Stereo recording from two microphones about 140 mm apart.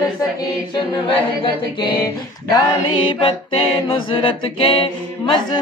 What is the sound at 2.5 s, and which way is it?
A capella, 35° left (ahead or behind).